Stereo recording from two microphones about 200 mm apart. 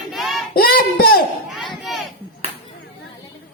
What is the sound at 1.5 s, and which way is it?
Crowd, centre (ahead or behind).